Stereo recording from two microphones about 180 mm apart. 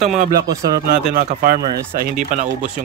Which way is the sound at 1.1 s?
50° right (ahead or behind).